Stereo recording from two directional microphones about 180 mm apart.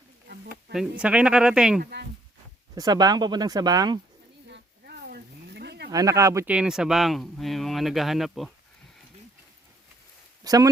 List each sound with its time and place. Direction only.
0.4 s speech: 5° right (ahead or behind)
1.8 s speech: 65° right (ahead or behind)
2.7 s speech: 20° right (ahead or behind)
4.4 s a sound: 65° right (ahead or behind)
5.9 s speech: 20° right (ahead or behind); by 8.5 s centre (ahead or behind)
10.4 s a man's voice: 20° right (ahead or behind)